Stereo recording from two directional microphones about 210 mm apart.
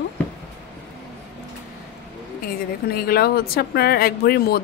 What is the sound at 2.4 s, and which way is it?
A woman's voice, 45° left (ahead or behind).